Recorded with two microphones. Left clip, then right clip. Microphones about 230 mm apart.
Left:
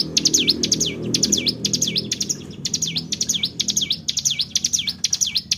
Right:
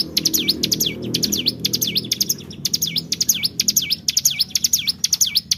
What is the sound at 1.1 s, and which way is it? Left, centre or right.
Bird, centre.